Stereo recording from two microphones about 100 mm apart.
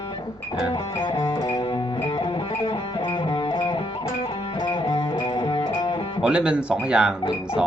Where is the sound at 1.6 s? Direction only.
50° left (ahead or behind).